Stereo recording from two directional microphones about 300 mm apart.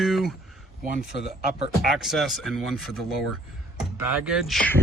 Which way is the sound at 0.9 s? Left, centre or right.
Right.